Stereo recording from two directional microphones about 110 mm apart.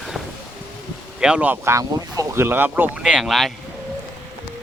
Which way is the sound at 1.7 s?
25° right (ahead or behind).